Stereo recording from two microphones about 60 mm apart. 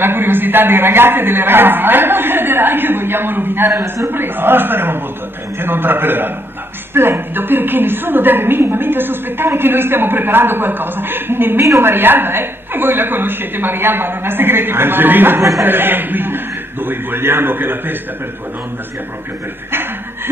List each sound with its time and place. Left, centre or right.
0.0 s a woman's voice: right